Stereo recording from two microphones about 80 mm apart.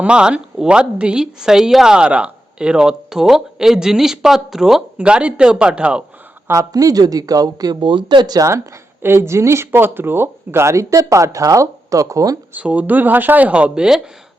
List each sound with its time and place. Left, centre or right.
0.0 s speech: centre
6.5 s speech: right
8.0 s speech: right
8.4 s speech: right
12.5 s speech: centre